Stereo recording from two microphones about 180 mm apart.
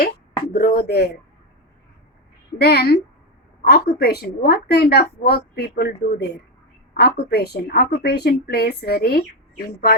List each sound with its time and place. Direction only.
0.5 s a woman's voice: 60° left (ahead or behind)
2.6 s a woman's voice: 60° left (ahead or behind)